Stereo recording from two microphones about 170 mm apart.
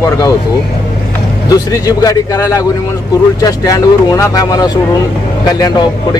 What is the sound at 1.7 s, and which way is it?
Speech, 20° left (ahead or behind).